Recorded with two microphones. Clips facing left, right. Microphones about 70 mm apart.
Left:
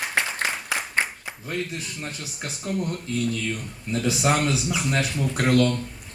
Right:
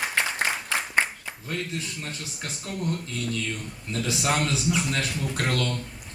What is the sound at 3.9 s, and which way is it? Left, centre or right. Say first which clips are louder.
Speech: left 4 dB; centre.